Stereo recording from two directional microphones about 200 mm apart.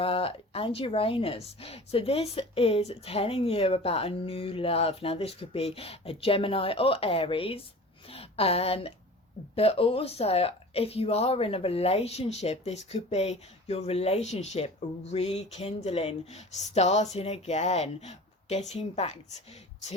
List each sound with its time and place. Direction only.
0.0 s speech: 30° left (ahead or behind)
8.0 s a sound: 30° left (ahead or behind)
9.6 s speech: 30° left (ahead or behind)